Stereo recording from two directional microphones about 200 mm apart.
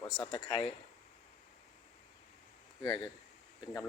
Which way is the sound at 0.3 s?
25° left (ahead or behind).